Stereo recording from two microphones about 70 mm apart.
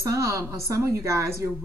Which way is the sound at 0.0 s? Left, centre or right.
Right.